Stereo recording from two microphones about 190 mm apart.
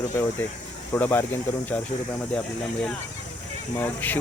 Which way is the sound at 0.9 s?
10° left (ahead or behind).